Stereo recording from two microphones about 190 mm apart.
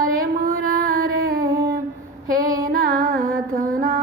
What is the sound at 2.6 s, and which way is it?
Music, 50° right (ahead or behind).